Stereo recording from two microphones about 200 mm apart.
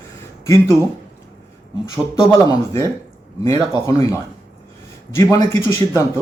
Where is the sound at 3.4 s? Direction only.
15° left (ahead or behind).